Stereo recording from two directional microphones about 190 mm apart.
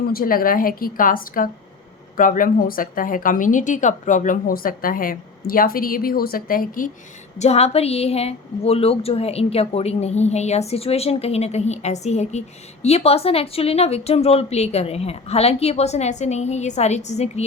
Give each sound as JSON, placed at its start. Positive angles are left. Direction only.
{"t": 0.0, "sound": "a woman's voice", "side_deg": 50}
{"t": 7.3, "sound": "a woman's voice", "side_deg": 35}